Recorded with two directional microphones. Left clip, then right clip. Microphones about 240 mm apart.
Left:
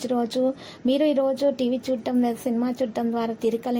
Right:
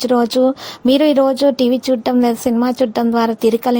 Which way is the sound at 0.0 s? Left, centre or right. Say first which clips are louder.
Right 10 dB; right.